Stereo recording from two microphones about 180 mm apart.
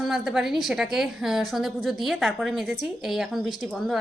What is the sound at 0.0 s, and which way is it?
A woman's voice, centre (ahead or behind).